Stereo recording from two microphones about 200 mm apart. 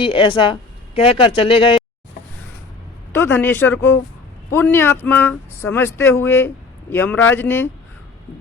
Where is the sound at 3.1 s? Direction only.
10° left (ahead or behind).